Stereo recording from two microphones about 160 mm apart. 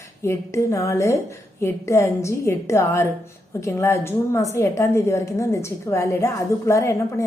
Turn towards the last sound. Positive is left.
turn(degrees=20)  # may be behind; listen again after turning